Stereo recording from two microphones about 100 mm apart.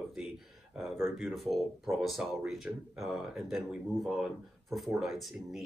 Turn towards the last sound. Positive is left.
turn(degrees=0)  # may be behind; listen again after turning